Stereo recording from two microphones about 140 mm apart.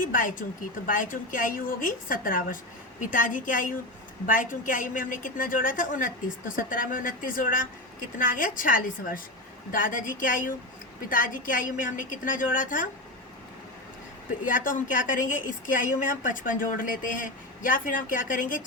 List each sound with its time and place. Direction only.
0.0 s speech: 75° left (ahead or behind)
14.4 s speech: 70° left (ahead or behind)